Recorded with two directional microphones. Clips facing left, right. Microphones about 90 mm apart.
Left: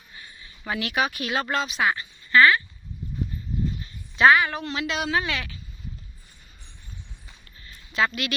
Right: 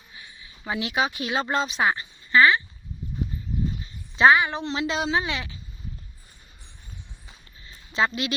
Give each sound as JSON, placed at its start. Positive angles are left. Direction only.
{"t": 0.2, "sound": "speech", "side_deg": -5}
{"t": 1.8, "sound": "a woman's voice", "side_deg": -30}
{"t": 2.3, "sound": "a woman's voice", "side_deg": -20}
{"t": 4.1, "sound": "a woman's voice", "side_deg": -25}
{"t": 7.3, "sound": "a sound", "side_deg": -25}